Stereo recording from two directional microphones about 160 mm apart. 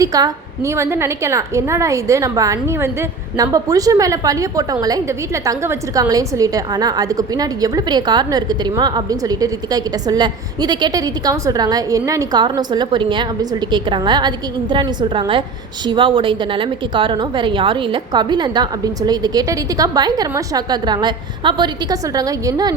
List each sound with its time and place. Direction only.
0.0 s a woman's voice: 20° right (ahead or behind)